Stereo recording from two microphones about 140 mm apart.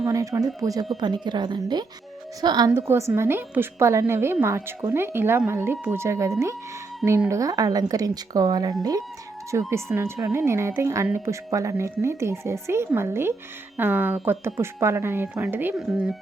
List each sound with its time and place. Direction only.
0.0 s a woman's voice: 25° right (ahead or behind)
2.8 s a woman's voice: 15° right (ahead or behind)